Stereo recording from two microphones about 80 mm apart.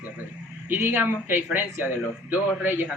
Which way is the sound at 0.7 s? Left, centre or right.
Right.